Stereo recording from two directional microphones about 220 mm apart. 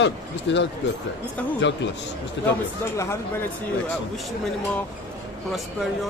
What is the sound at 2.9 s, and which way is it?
Speech, 15° left (ahead or behind).